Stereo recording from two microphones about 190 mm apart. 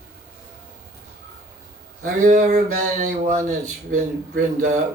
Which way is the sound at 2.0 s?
45° right (ahead or behind).